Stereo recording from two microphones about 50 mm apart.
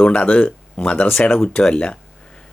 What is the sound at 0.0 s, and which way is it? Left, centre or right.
Speech, left.